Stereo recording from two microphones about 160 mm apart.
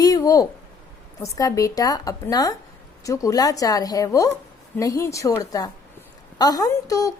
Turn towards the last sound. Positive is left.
turn(degrees=20)  # may be behind; listen again after turning